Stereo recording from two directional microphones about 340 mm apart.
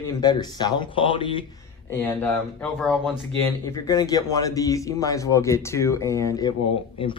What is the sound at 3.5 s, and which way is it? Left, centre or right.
Speech, centre.